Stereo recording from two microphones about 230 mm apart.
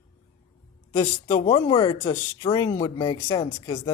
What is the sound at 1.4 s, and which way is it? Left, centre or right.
Speech, left.